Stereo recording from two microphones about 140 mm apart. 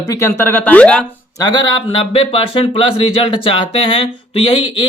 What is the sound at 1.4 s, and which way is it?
Speech, 30° left (ahead or behind).